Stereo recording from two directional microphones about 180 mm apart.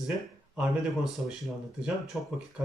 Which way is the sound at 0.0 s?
Centre (ahead or behind).